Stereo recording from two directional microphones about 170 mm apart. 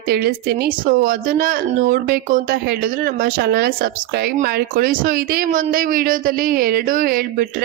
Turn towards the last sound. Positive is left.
turn(degrees=-60)  # may be behind; listen again after turning